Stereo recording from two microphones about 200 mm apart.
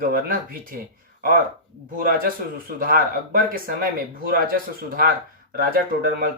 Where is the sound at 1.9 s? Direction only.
45° right (ahead or behind).